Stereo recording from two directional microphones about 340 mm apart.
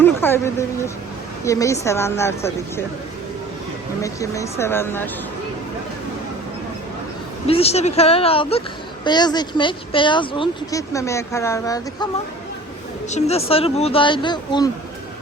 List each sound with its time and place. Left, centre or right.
0.0 s a sound: centre
1.5 s speech: centre
4.0 s speech: centre
7.4 s speech: centre
13.1 s speech: centre